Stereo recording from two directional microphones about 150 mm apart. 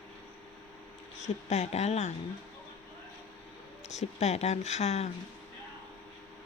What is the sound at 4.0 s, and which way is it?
Speech, 45° left (ahead or behind).